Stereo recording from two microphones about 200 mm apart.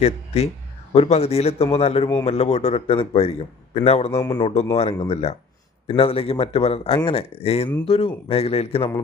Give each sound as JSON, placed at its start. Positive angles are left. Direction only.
{"t": 0.0, "sound": "a man's voice", "side_deg": 35}
{"t": 4.1, "sound": "speech", "side_deg": 15}
{"t": 5.0, "sound": "a man's voice", "side_deg": 30}